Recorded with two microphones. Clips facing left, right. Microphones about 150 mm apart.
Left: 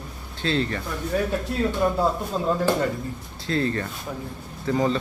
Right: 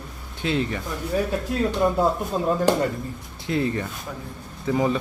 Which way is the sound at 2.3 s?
10° right (ahead or behind).